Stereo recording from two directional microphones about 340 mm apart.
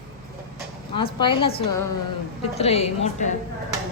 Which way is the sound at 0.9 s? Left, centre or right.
Centre.